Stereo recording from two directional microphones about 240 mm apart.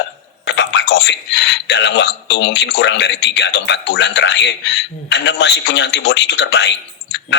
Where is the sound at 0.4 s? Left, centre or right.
Left.